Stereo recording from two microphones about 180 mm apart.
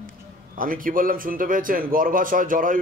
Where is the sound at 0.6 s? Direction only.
50° right (ahead or behind).